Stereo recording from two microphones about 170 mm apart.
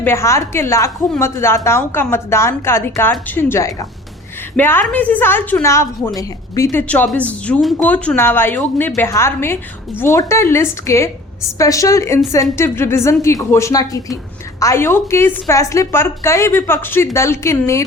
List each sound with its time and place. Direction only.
0.0 s a woman's voice: 15° left (ahead or behind)